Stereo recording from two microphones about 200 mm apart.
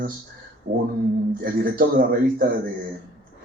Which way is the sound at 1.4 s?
45° right (ahead or behind).